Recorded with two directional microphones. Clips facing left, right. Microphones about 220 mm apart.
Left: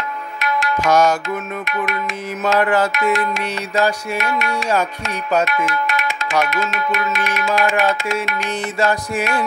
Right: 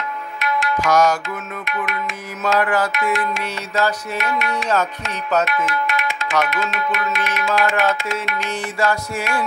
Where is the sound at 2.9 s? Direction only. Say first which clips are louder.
Left 3 dB; 40° left (ahead or behind).